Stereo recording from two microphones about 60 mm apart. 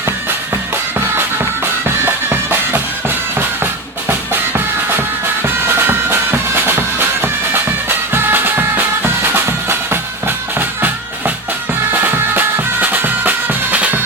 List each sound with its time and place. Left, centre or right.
0.9 s music: right